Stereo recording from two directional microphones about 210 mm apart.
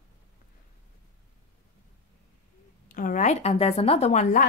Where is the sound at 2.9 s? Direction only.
40° left (ahead or behind).